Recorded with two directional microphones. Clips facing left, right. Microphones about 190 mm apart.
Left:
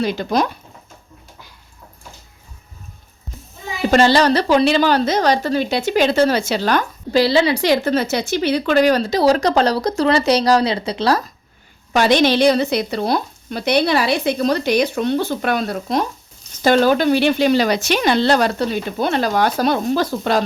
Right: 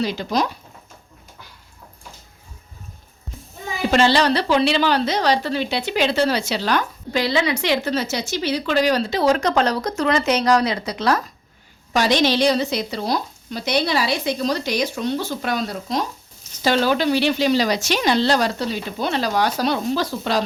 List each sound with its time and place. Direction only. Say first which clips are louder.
0.0 s speech: left 3 dB; 55° left (ahead or behind)
3.9 s speech: left 3 dB; 45° left (ahead or behind)
7.1 s a woman's voice: left 6 dB; 35° left (ahead or behind)
11.9 s speech: left 4 dB; 55° left (ahead or behind)